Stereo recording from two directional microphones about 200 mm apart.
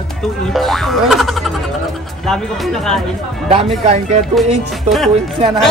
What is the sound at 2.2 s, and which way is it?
Speech, centre (ahead or behind).